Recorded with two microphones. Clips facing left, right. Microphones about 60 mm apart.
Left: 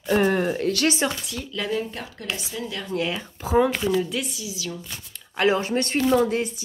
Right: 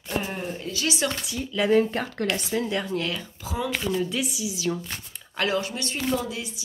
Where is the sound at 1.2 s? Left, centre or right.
Centre.